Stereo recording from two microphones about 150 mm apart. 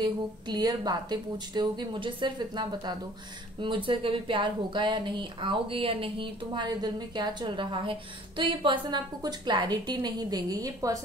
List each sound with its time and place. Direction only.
0.0 s a woman's voice: 25° right (ahead or behind)